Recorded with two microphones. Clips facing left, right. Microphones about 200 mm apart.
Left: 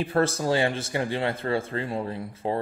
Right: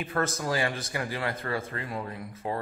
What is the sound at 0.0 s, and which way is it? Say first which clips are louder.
Speech: left 6 dB; 30° left (ahead or behind).